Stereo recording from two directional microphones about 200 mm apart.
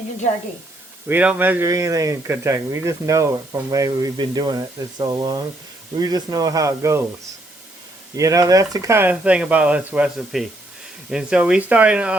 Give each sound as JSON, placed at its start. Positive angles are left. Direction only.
{"t": 1.0, "sound": "speech", "side_deg": -10}
{"t": 8.1, "sound": "speech", "side_deg": -15}